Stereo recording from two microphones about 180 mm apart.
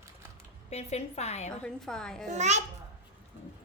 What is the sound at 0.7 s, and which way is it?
Speech, 35° left (ahead or behind).